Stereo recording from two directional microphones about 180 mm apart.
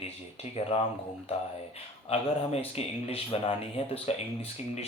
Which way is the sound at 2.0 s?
35° left (ahead or behind).